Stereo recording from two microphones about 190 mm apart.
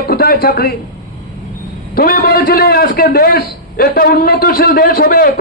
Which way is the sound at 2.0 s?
50° left (ahead or behind).